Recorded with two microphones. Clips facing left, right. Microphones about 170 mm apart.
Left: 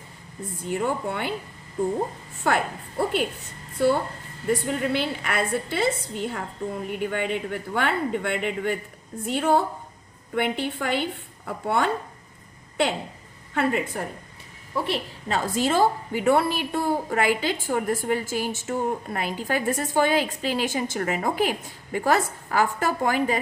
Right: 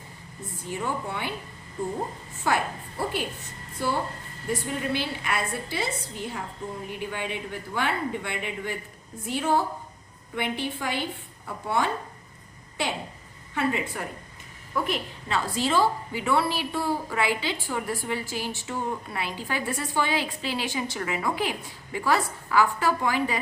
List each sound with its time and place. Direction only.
0.7 s a woman's voice: 55° left (ahead or behind)
3.0 s a woman's voice: 60° left (ahead or behind)
13.5 s a woman's voice: 55° left (ahead or behind)
14.8 s a woman's voice: 35° left (ahead or behind)